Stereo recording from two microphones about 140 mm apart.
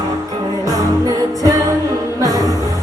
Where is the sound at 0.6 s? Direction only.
25° right (ahead or behind).